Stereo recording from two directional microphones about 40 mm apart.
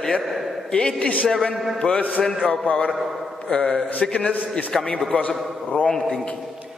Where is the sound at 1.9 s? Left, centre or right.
Left.